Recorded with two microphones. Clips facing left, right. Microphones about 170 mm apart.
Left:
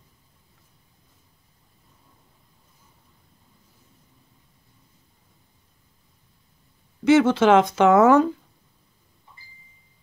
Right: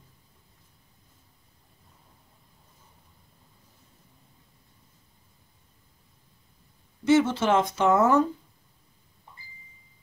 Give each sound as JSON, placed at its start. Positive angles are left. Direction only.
{"t": 7.1, "sound": "speech", "side_deg": 90}